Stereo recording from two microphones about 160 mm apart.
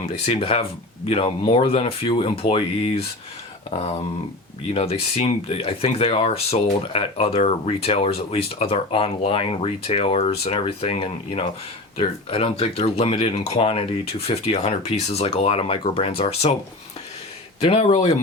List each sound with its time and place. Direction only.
0.3 s speech: 35° left (ahead or behind)
4.7 s speech: 35° left (ahead or behind)
17.6 s speech: 40° left (ahead or behind)